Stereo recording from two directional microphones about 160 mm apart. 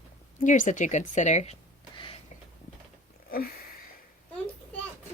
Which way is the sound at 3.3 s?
70° left (ahead or behind).